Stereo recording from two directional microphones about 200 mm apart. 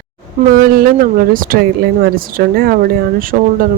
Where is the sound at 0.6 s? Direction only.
45° right (ahead or behind).